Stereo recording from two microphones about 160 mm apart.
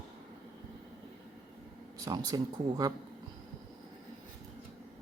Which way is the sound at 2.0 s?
25° right (ahead or behind).